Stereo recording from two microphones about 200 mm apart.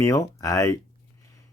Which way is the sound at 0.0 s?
15° left (ahead or behind).